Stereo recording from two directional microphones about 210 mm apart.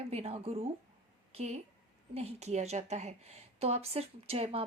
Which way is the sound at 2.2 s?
30° right (ahead or behind).